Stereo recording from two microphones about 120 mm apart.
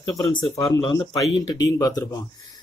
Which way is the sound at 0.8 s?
45° left (ahead or behind).